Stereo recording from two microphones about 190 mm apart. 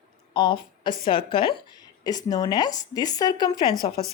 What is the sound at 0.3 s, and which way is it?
A woman's voice, 25° left (ahead or behind).